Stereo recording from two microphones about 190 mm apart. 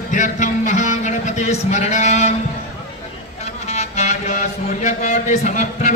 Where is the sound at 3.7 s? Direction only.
35° left (ahead or behind).